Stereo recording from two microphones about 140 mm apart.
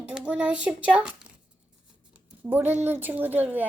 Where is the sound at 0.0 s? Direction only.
10° right (ahead or behind).